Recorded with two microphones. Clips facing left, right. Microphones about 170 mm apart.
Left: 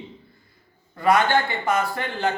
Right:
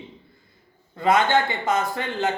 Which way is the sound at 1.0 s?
20° right (ahead or behind).